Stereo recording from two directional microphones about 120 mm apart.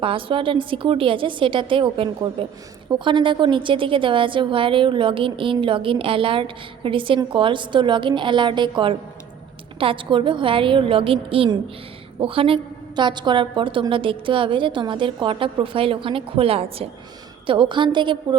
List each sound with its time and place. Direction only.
0.0 s a woman's voice: 45° right (ahead or behind)